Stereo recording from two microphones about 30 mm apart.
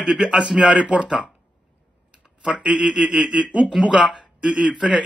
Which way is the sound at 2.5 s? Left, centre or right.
Right.